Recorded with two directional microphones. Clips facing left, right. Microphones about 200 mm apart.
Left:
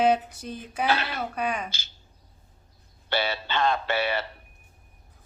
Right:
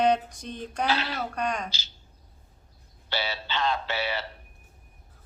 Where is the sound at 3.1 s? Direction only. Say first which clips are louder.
Left 4 dB; 55° left (ahead or behind).